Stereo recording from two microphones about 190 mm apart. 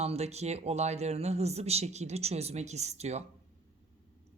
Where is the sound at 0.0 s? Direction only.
35° right (ahead or behind).